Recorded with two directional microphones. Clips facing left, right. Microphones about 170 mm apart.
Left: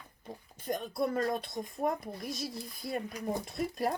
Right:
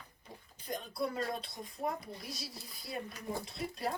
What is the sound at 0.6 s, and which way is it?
A woman's voice, 50° left (ahead or behind).